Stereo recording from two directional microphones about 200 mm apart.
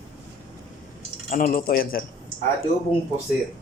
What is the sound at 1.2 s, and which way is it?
Speech, 45° left (ahead or behind).